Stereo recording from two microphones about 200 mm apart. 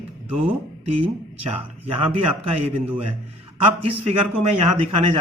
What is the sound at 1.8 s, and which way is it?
Speech, 30° right (ahead or behind).